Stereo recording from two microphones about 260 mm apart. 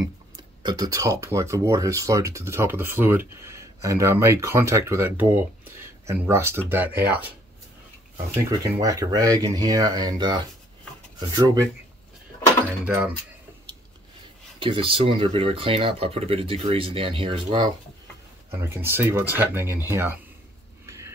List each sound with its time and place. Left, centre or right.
0.0 s speech: centre
8.5 s speech: centre
12.8 s speech: centre
14.6 s speech: centre
18.5 s speech: centre
20.8 s a sound: centre